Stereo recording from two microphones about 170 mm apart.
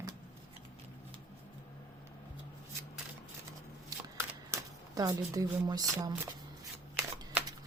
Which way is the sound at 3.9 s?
20° right (ahead or behind).